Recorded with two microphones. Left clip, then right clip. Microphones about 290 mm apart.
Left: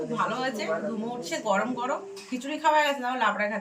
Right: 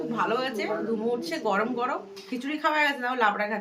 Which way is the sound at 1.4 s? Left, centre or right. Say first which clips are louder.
Left 1 dB; centre.